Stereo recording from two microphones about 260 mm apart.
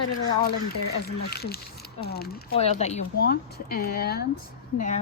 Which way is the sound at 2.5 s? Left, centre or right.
Left.